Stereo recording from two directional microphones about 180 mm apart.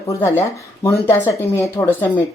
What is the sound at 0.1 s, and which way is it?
Speech, 15° left (ahead or behind).